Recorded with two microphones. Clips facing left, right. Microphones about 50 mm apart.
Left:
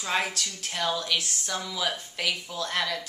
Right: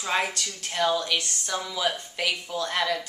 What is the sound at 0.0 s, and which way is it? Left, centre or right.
Speech, centre.